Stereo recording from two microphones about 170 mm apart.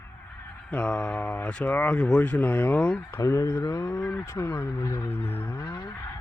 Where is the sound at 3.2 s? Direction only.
20° left (ahead or behind).